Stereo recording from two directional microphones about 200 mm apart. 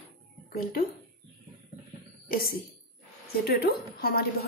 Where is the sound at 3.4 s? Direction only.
50° left (ahead or behind).